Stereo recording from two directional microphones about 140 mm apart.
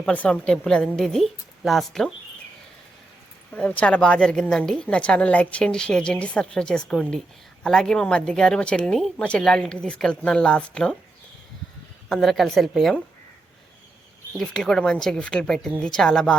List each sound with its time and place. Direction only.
0.0 s speech: 10° left (ahead or behind)
3.5 s a woman's voice: 10° left (ahead or behind)
12.0 s speech: centre (ahead or behind)
14.3 s speech: 5° left (ahead or behind)